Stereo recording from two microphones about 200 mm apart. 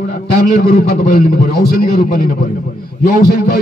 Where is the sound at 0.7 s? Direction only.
50° left (ahead or behind).